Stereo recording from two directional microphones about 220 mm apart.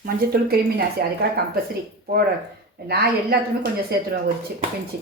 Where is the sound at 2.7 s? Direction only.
45° right (ahead or behind).